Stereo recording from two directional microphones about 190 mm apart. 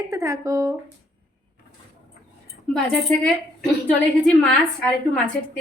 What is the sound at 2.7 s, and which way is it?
A woman's voice, 5° left (ahead or behind).